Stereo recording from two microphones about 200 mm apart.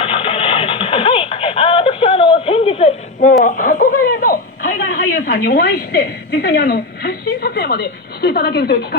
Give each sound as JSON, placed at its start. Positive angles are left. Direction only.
{"t": 0.0, "sound": "music", "side_deg": 25}
{"t": 3.4, "sound": "speech", "side_deg": 45}